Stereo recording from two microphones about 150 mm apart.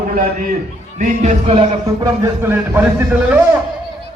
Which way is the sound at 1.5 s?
35° right (ahead or behind).